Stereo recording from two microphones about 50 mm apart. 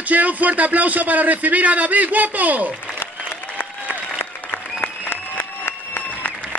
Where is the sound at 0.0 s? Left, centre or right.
Right.